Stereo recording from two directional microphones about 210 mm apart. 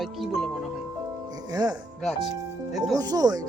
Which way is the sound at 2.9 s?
15° right (ahead or behind).